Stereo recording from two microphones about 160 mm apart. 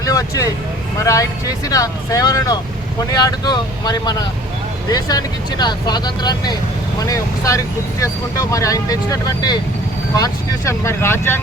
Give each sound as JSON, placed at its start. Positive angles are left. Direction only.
{"t": 0.0, "sound": "speech", "side_deg": 20}